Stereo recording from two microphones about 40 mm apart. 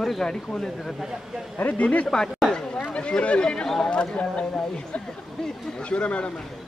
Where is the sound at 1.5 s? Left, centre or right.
Left.